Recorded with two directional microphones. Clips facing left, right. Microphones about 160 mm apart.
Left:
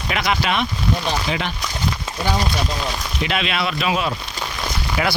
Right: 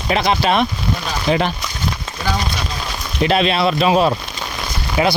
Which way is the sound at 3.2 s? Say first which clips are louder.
Right 8 dB; 35° right (ahead or behind).